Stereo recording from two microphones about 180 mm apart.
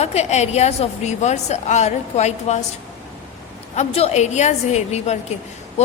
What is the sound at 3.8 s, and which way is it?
A woman's voice, 35° left (ahead or behind).